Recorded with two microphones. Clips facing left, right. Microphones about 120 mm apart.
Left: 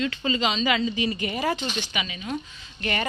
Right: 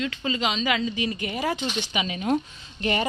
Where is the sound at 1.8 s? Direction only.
25° right (ahead or behind).